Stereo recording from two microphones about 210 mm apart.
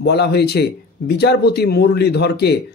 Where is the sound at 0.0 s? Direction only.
50° left (ahead or behind).